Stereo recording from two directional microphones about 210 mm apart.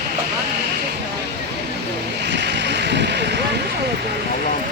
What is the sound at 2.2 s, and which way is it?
Vehicle, 55° right (ahead or behind).